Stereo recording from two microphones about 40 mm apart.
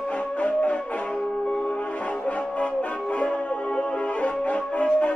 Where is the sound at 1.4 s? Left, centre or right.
Left.